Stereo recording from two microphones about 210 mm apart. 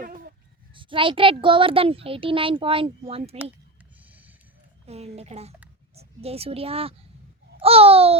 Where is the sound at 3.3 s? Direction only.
10° right (ahead or behind).